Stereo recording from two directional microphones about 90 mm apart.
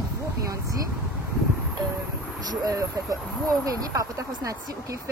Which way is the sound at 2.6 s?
40° right (ahead or behind).